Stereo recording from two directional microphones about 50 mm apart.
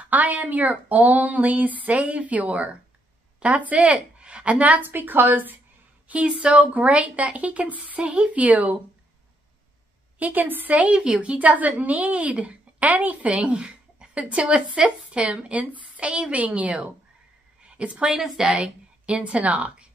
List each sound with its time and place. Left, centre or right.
0.1 s a woman's voice: right
4.8 s a woman's voice: right
6.0 s a woman's voice: right
10.1 s a woman's voice: right